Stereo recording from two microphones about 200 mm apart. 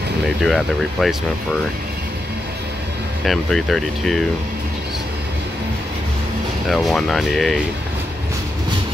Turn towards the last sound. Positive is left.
turn(degrees=0)  # may be behind; listen again after turning